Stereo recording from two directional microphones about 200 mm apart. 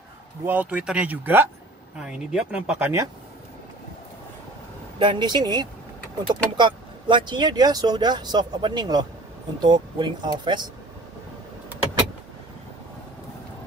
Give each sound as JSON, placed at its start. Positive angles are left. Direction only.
{"t": 0.5, "sound": "speech", "side_deg": -10}
{"t": 4.9, "sound": "speech", "side_deg": -20}